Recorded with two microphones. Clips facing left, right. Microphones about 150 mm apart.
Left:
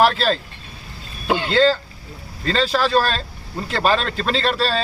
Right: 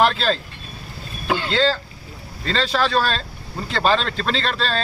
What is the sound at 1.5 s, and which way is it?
Speech, centre (ahead or behind).